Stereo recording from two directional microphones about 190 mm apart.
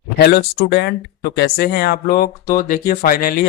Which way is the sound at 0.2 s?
60° left (ahead or behind).